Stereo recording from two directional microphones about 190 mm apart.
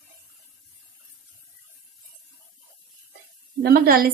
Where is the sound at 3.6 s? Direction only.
55° right (ahead or behind).